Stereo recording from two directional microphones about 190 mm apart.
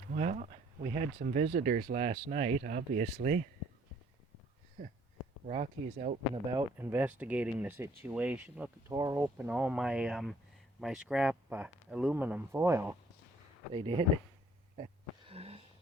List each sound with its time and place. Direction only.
0.1 s speech: 40° right (ahead or behind)
1.2 s speech: 45° right (ahead or behind)
5.5 s speech: 40° right (ahead or behind)
6.5 s speech: 15° right (ahead or behind)
13.7 s speech: 25° right (ahead or behind)
15.3 s wheeze: 30° right (ahead or behind)